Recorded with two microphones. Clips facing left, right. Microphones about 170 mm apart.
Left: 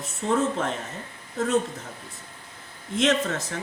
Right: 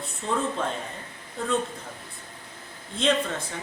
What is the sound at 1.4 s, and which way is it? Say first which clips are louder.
Speech: left 4 dB; 90° left.